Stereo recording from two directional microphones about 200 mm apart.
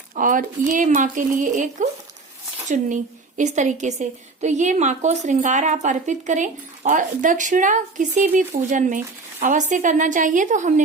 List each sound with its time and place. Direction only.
0.2 s a woman's voice: 40° right (ahead or behind)